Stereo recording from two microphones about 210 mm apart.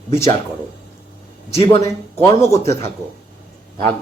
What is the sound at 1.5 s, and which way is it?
Speech, 15° left (ahead or behind).